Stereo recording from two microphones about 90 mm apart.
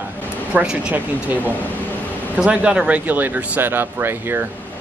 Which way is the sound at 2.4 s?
10° right (ahead or behind).